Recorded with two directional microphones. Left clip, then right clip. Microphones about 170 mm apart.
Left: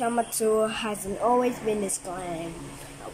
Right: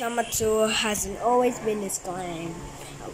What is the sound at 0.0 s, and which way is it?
Speech, centre (ahead or behind).